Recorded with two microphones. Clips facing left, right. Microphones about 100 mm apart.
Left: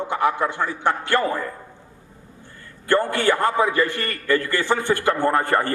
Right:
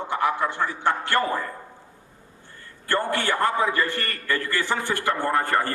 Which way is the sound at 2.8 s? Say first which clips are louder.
Left 5 dB; 20° left (ahead or behind).